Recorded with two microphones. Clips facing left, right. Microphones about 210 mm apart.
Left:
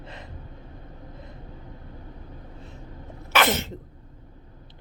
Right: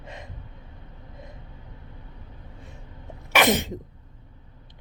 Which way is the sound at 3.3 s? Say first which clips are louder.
Right 2 dB; 15° right (ahead or behind).